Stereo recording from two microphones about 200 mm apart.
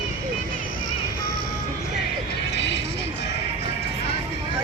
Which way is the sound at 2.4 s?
60° left (ahead or behind).